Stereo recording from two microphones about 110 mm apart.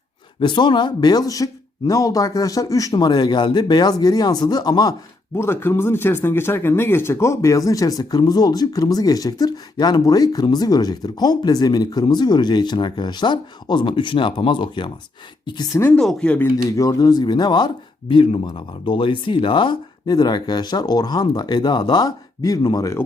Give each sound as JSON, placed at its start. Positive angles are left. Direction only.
{"t": 0.3, "sound": "speech", "side_deg": 45}
{"t": 5.4, "sound": "speech", "side_deg": 20}
{"t": 15.7, "sound": "speech", "side_deg": 20}
{"t": 16.0, "sound": "speech", "side_deg": 5}
{"t": 16.6, "sound": "speech", "side_deg": 30}